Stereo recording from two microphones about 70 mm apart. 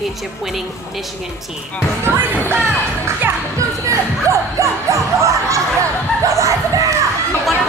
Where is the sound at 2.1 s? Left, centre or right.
Right.